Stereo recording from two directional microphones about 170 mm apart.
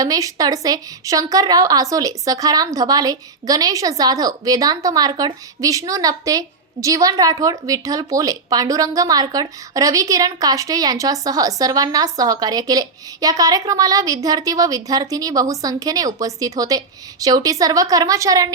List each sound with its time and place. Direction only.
0.0 s a woman's voice: 20° right (ahead or behind)